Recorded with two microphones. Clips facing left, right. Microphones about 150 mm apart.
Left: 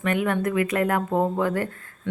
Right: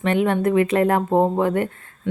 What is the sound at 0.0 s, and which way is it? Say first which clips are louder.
Speech: right 4 dB; 25° right (ahead or behind).